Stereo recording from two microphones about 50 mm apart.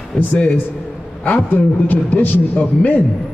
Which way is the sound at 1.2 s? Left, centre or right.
Left.